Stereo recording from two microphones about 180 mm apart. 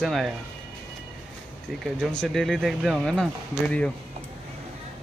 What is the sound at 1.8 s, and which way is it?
Speech, centre (ahead or behind).